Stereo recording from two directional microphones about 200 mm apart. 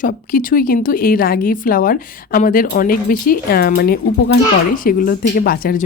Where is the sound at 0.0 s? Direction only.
45° left (ahead or behind).